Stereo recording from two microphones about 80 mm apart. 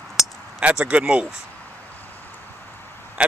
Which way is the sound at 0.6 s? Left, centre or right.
Centre.